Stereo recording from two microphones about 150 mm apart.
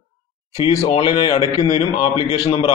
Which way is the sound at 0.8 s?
40° left (ahead or behind).